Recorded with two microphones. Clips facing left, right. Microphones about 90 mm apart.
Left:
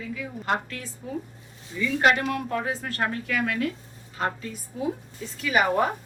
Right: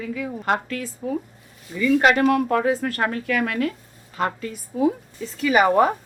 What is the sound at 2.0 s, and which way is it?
A woman's voice, 90° right.